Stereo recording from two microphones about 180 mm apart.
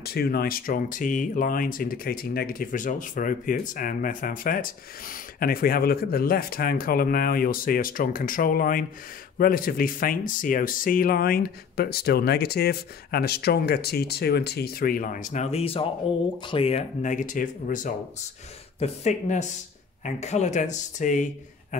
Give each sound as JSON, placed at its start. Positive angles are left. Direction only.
{"t": 0.0, "sound": "speech", "side_deg": 60}